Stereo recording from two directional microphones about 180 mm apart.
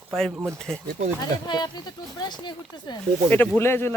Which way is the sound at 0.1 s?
Centre (ahead or behind).